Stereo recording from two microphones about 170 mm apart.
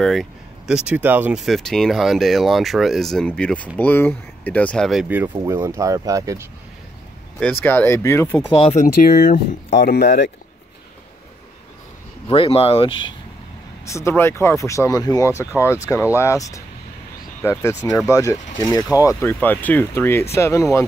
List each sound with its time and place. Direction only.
0.0 s speech: centre (ahead or behind)
5.0 s speech: 10° right (ahead or behind)
7.6 s speech: 10° left (ahead or behind)
8.5 s speech: 35° left (ahead or behind)
8.8 s speech: 55° left (ahead or behind)
9.8 s speech: 70° left (ahead or behind)
12.3 s speech: 35° left (ahead or behind)
13.8 s speech: 15° left (ahead or behind)